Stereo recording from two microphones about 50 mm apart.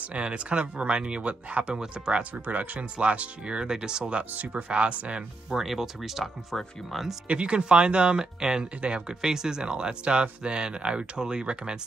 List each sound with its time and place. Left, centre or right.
0.0 s speech: right
2.3 s speech: right
4.3 s speech: right
5.5 s speech: centre
7.2 s speech: right